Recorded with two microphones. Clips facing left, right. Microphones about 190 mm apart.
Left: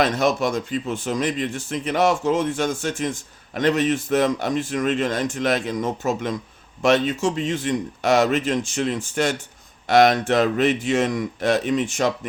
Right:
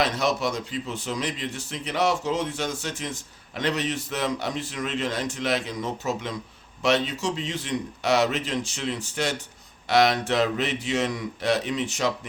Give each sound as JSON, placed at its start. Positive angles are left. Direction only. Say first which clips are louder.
{"t": 0.0, "sound": "speech", "louder": "left 4 dB", "side_deg": 50}